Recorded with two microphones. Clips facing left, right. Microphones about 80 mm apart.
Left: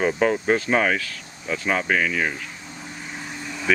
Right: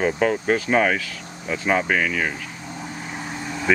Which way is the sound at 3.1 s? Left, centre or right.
Right.